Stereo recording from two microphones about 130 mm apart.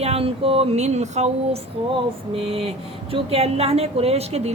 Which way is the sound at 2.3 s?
45° right (ahead or behind).